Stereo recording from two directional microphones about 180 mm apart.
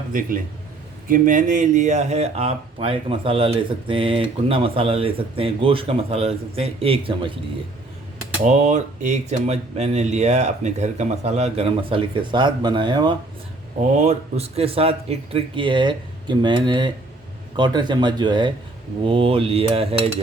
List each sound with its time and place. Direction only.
0.1 s a man's voice: 50° right (ahead or behind); by 7.3 s 30° right (ahead or behind)
8.4 s speech: 40° right (ahead or behind); by 13.1 s 25° right (ahead or behind)
13.9 s speech: 40° right (ahead or behind)